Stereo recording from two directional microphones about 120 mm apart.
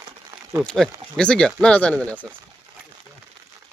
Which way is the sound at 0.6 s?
5° left (ahead or behind).